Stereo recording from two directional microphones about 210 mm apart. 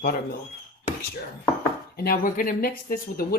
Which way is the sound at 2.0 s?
40° left (ahead or behind).